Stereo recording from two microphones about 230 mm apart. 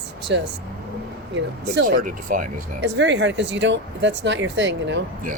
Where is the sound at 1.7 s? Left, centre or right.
Right.